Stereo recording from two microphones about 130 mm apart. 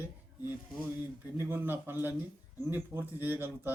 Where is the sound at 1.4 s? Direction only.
15° right (ahead or behind).